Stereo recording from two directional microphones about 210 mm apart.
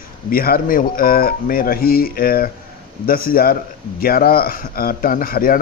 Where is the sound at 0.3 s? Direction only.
45° left (ahead or behind).